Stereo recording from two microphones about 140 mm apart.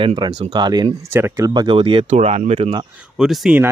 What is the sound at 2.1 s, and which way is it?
Speech, 50° right (ahead or behind).